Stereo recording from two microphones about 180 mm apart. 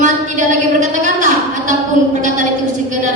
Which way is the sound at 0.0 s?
45° right (ahead or behind).